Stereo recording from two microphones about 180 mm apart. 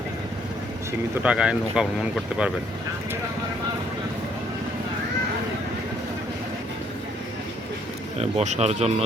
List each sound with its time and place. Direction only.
1.2 s speech: 5° right (ahead or behind)
8.2 s speech: 40° right (ahead or behind)